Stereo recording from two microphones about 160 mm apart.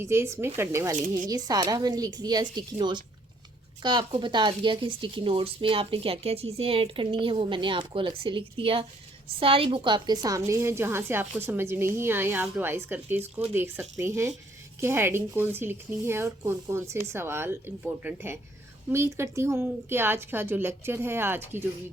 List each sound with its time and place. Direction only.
0.0 s speech: 15° right (ahead or behind)